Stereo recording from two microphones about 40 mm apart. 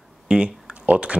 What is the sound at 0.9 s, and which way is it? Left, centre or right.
Speech, right.